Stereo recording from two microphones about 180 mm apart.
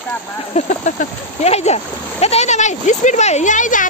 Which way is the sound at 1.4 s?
35° left (ahead or behind).